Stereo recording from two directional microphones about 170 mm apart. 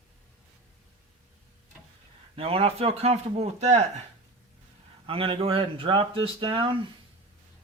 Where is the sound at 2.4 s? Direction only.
35° right (ahead or behind).